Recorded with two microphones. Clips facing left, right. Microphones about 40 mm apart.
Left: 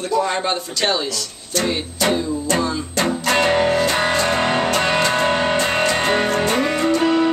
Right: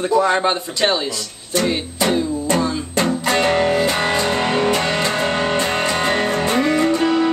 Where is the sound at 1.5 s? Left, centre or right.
Centre.